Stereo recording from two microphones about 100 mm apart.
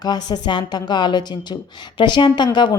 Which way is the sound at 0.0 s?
45° left (ahead or behind).